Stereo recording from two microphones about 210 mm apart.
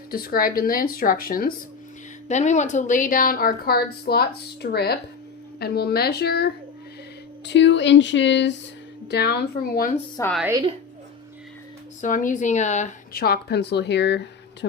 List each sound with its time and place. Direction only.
0.1 s a woman's voice: 45° left (ahead or behind)
10.2 s a woman's voice: 15° left (ahead or behind)
10.5 s a woman's voice: 20° right (ahead or behind)
12.0 s a woman's voice: 40° left (ahead or behind); by 14.8 s 55° left (ahead or behind)